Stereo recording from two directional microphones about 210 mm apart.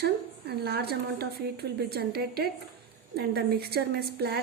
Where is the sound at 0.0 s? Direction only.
50° right (ahead or behind).